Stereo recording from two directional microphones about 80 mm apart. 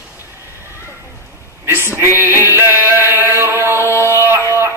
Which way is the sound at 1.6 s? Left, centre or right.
Right.